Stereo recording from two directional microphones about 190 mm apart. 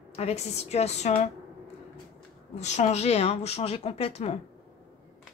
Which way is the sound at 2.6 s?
35° left (ahead or behind).